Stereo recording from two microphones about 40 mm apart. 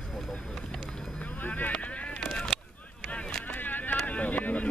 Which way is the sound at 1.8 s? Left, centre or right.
Left.